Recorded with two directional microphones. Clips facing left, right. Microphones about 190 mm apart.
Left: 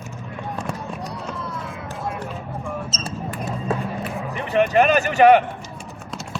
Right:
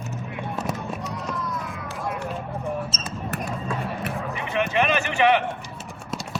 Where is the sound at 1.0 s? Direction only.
30° left (ahead or behind).